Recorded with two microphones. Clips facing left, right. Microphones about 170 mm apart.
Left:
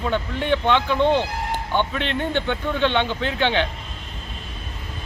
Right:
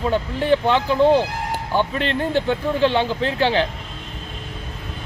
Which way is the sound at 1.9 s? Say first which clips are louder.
Right 3 dB; 40° right (ahead or behind).